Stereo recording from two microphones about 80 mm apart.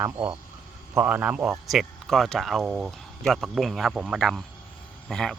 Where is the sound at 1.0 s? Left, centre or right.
Centre.